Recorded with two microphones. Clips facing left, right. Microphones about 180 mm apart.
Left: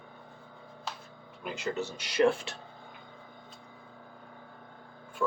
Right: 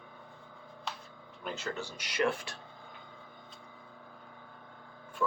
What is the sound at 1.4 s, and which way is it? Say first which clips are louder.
Speech: left 4 dB; 15° left (ahead or behind).